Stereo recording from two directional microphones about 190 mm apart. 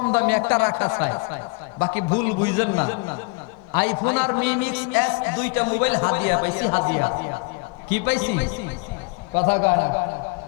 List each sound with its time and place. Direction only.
0.2 s a man's voice: 15° left (ahead or behind)
7.9 s a man's voice: 15° left (ahead or behind)
9.6 s a man's voice: 25° left (ahead or behind)